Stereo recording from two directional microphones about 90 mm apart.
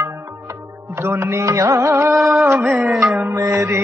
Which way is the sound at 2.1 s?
Centre (ahead or behind).